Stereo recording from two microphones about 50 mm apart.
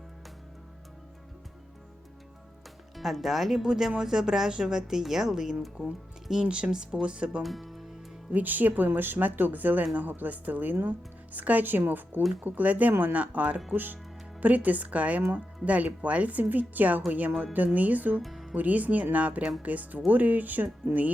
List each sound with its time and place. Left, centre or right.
2.9 s speech: centre; by 7.4 s right
7.4 s speech: centre
8.3 s speech: right
13.2 s speech: right
13.7 s speech: right
18.2 s music: centre
18.5 s speech: right